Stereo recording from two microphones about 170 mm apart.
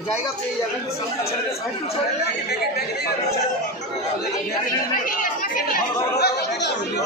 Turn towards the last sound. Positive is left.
turn(degrees=75)  # may be behind; listen again after turning